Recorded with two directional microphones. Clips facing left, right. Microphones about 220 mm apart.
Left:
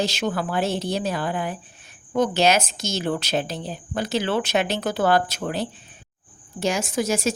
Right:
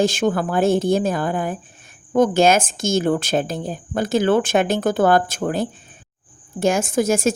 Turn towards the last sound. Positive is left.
turn(degrees=-50)  # may be behind; listen again after turning